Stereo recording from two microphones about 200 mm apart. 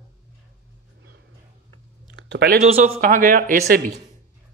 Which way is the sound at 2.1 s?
55° right (ahead or behind).